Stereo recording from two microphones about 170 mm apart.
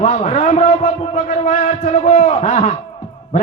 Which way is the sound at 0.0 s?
40° left (ahead or behind).